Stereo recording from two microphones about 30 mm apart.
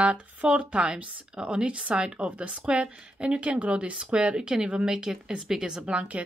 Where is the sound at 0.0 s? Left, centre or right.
Right.